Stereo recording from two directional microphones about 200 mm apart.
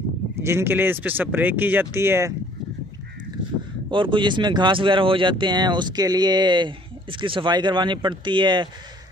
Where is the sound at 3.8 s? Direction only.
25° right (ahead or behind).